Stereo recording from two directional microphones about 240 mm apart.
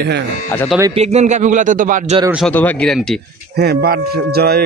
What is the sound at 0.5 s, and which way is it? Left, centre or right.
Speech, centre.